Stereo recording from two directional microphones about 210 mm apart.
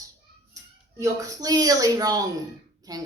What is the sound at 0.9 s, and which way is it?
Speech, 15° right (ahead or behind).